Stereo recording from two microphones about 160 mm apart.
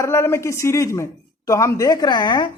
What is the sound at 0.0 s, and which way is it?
A woman's voice, 15° left (ahead or behind).